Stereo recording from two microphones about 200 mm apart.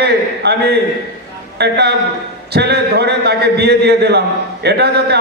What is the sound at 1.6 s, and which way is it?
A man's voice, 55° right (ahead or behind).